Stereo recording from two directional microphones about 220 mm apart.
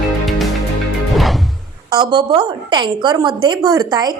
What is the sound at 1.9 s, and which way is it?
A woman's voice, 20° right (ahead or behind).